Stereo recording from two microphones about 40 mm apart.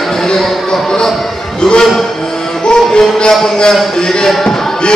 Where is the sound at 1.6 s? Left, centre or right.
Centre.